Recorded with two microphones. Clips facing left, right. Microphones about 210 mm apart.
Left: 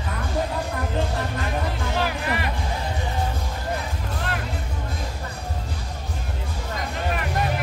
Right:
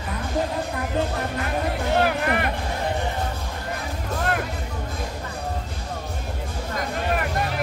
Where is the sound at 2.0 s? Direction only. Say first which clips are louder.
Right 3 dB; 55° right (ahead or behind).